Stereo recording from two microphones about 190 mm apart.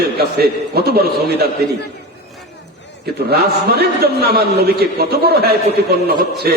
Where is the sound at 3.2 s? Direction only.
55° right (ahead or behind).